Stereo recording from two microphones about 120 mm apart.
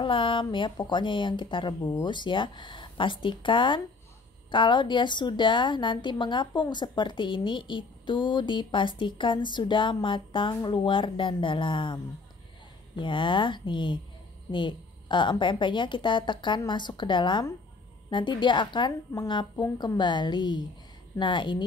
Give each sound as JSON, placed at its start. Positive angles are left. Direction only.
{"t": 0.0, "sound": "a woman's voice", "side_deg": 45}
{"t": 19.5, "sound": "a woman's voice", "side_deg": 25}
{"t": 20.0, "sound": "a woman's voice", "side_deg": 40}